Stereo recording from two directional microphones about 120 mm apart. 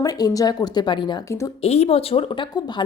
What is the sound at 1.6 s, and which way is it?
Speech, 60° left (ahead or behind).